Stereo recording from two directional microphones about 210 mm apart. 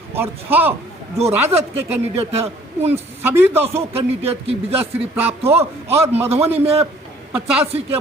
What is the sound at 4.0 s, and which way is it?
A man's voice, 30° right (ahead or behind).